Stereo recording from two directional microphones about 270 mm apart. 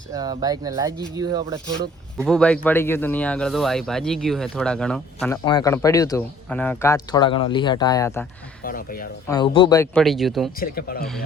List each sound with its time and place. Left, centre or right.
0.1 s speech: centre
2.2 s speech: centre
5.5 s speech: centre
8.6 s speech: left
9.3 s speech: centre
10.6 s speech: left